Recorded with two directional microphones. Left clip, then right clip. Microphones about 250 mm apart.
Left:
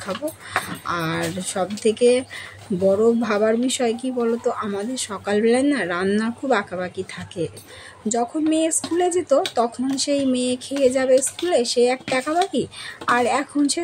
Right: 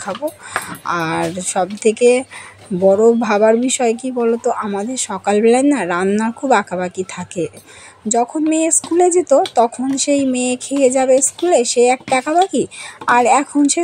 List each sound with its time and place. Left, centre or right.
0.0 s speech: centre